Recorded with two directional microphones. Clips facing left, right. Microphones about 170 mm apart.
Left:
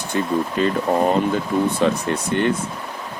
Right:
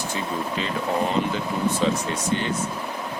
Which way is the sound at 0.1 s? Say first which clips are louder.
Left 10 dB; 50° left (ahead or behind).